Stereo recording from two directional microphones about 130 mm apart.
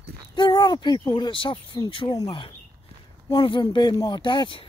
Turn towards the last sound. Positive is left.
turn(degrees=40)  # may be behind; listen again after turning